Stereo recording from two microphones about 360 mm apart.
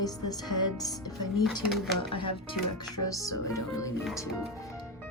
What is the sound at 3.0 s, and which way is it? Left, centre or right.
Speech, centre.